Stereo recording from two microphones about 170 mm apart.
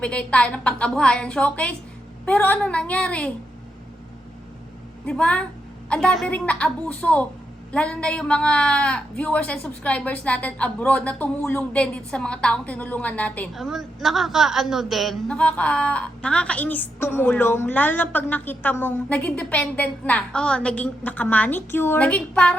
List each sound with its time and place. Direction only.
0.0 s a man's voice: 5° left (ahead or behind)
5.0 s a man's voice: 5° left (ahead or behind)